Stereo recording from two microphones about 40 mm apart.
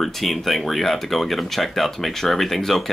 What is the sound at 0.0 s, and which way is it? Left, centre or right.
Speech, centre.